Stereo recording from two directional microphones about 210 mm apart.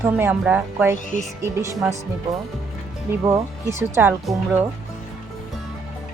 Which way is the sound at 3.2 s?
15° right (ahead or behind).